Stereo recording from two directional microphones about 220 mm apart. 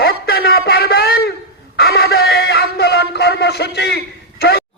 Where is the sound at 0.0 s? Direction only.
45° left (ahead or behind).